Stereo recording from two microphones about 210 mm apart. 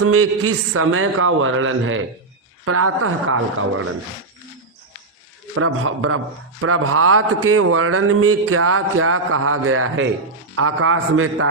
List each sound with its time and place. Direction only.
0.0 s a man's voice: 90° right; by 2.0 s 70° right (ahead or behind)
2.6 s a man's voice: 90° right
5.5 s a man's voice: 85° right